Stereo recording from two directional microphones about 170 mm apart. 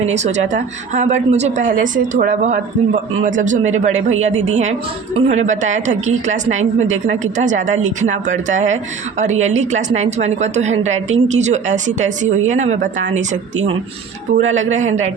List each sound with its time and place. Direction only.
0.0 s a woman's voice: 40° right (ahead or behind)